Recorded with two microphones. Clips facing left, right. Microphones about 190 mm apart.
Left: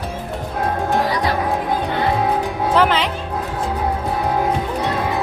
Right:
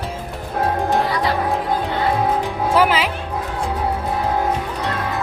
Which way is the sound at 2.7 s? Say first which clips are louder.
Even; 5° right (ahead or behind).